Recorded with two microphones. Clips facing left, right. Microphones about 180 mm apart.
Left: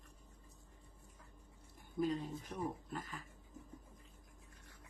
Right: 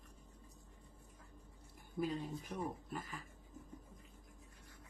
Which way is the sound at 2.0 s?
10° right (ahead or behind).